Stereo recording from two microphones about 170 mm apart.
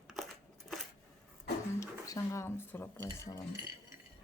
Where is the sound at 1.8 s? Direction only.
20° left (ahead or behind).